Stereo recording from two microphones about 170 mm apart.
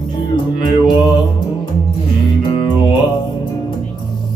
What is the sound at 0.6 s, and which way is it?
Music, 30° left (ahead or behind).